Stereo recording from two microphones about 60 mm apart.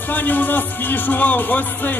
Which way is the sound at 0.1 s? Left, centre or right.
Left.